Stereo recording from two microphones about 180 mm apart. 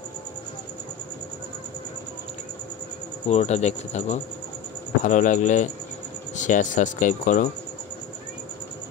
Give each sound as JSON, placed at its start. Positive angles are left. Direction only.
{"t": 3.3, "sound": "speech", "side_deg": 40}